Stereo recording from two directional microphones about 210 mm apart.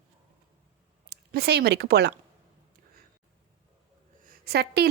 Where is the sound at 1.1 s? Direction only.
50° right (ahead or behind).